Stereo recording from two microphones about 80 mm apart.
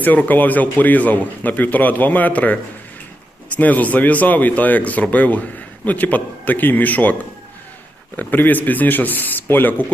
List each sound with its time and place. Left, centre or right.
0.0 s speech: left
3.6 s speech: centre